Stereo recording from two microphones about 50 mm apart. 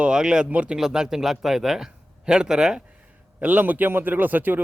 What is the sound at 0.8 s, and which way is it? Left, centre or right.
A man's voice, centre.